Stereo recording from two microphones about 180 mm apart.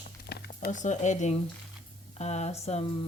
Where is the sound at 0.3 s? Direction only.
65° left (ahead or behind).